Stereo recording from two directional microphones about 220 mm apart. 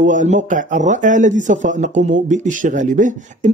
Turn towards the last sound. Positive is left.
turn(degrees=-35)  # may be behind; listen again after turning